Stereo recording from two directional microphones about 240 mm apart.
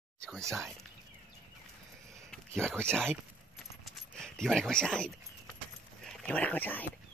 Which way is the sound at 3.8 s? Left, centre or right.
Centre.